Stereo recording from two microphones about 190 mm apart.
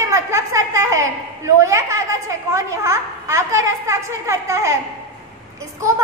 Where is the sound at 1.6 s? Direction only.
15° right (ahead or behind).